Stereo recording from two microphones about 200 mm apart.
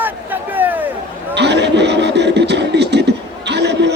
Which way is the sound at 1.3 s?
60° right (ahead or behind).